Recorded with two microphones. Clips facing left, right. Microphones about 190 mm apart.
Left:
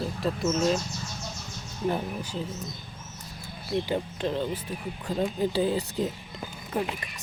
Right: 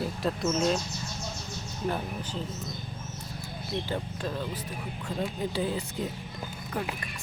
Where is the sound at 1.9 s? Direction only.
10° left (ahead or behind).